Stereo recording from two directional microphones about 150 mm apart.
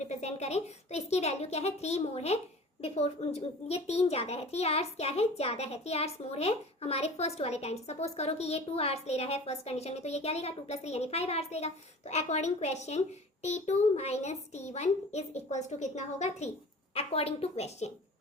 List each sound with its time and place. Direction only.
0.0 s a child's voice: 50° left (ahead or behind)